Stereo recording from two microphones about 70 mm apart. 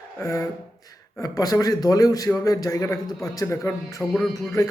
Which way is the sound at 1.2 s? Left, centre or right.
Left.